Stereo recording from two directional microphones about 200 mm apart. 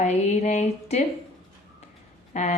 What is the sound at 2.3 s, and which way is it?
Speech, 35° left (ahead or behind).